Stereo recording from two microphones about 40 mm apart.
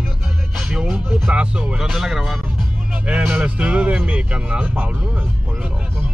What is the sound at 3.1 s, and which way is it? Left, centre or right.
Speech, right.